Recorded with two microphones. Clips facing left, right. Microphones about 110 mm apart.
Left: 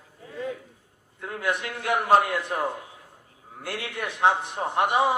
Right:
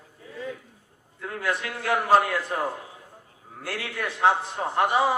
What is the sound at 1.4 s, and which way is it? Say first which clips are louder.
A man's voice: even; 20° left (ahead or behind).